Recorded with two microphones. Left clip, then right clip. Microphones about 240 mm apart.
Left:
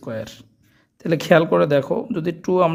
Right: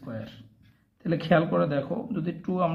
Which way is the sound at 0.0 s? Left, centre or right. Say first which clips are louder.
Left 10 dB; left.